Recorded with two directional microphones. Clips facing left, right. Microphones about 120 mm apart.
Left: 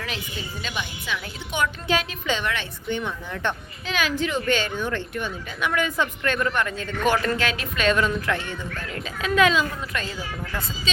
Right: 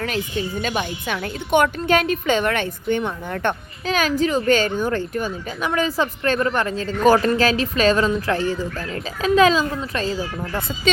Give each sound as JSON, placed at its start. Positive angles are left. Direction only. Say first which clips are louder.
{"t": 0.6, "sound": "a woman's voice", "louder": "right 8 dB", "side_deg": -50}